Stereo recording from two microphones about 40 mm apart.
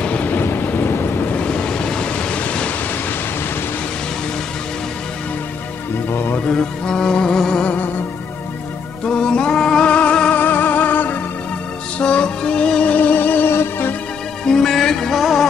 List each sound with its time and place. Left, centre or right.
0.0 s vehicle: left
0.4 s vehicle: left
0.7 s thunder: left
0.9 s wind noise: left
1.2 s waves: left
6.5 s music: centre
9.0 s music: left
10.3 s music: left
12.0 s music: left
12.8 s music: left
13.1 s music: left
13.5 s music: left
14.4 s music: centre